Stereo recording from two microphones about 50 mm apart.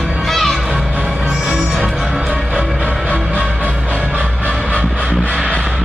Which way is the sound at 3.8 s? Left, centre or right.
Centre.